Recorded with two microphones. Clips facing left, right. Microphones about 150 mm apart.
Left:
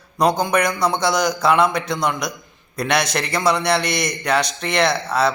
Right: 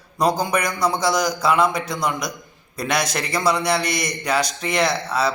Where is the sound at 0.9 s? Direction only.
Centre (ahead or behind).